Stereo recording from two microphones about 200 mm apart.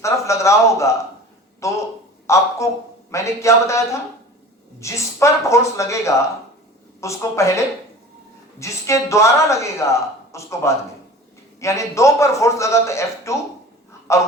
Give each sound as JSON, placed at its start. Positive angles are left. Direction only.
{"t": 0.0, "sound": "a man's voice", "side_deg": 15}
{"t": 4.8, "sound": "speech", "side_deg": 15}